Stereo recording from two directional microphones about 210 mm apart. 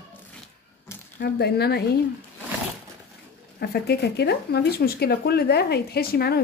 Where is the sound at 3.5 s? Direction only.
50° left (ahead or behind).